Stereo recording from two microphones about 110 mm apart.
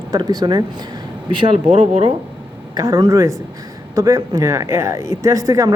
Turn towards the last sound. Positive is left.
turn(degrees=-30)  # may be behind; listen again after turning